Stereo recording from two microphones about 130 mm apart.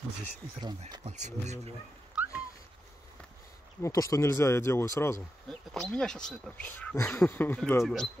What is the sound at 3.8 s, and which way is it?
Speech, 25° left (ahead or behind).